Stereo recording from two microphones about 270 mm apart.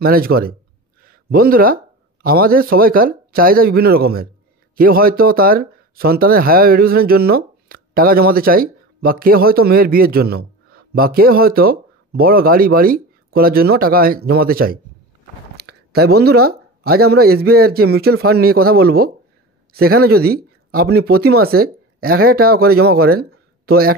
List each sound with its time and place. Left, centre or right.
0.0 s speech: right
1.0 s a sound: right
2.2 s speech: right
15.9 s speech: right